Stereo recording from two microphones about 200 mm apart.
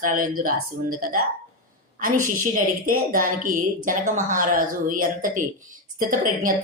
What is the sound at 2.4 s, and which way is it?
A woman's voice, 45° right (ahead or behind).